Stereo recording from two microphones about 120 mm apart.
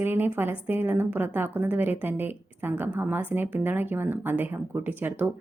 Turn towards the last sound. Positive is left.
turn(degrees=-15)  # may be behind; listen again after turning